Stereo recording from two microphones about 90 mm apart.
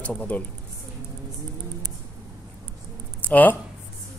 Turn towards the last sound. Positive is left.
turn(degrees=20)  # may be behind; listen again after turning